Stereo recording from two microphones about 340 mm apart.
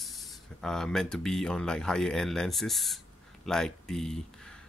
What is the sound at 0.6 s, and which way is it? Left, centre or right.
Speech, centre.